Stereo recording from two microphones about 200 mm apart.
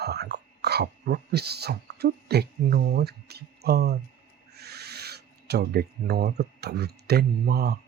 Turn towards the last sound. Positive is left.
turn(degrees=-55)  # may be behind; listen again after turning